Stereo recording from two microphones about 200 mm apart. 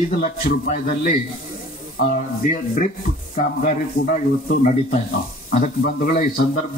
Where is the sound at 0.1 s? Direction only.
40° left (ahead or behind).